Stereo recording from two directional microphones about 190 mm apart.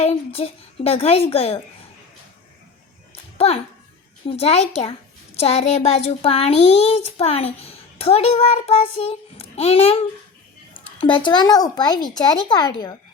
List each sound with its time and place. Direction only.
0.0 s a woman's voice: 30° left (ahead or behind)
3.3 s a child's voice: 30° left (ahead or behind)
11.0 s speech: 25° left (ahead or behind)